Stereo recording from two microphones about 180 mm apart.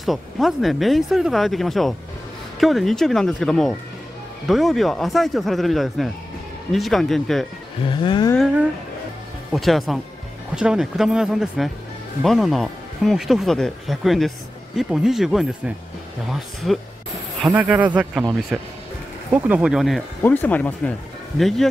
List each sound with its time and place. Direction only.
0.0 s speech: centre (ahead or behind)
7.9 s a sound: 25° left (ahead or behind)
9.5 s speech: centre (ahead or behind)
20.2 s speech: 10° left (ahead or behind)